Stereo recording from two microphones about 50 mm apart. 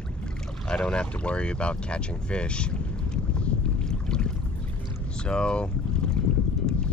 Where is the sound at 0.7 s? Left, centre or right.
Centre.